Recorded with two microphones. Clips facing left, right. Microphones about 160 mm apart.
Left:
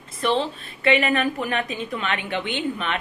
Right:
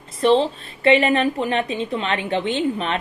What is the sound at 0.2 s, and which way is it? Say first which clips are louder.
A woman's voice: right 6 dB; 35° right (ahead or behind).